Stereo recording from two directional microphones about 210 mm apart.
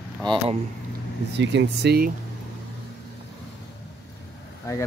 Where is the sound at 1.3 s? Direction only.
55° right (ahead or behind).